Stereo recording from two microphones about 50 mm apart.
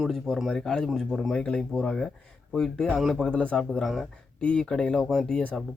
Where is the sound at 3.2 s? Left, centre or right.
Centre.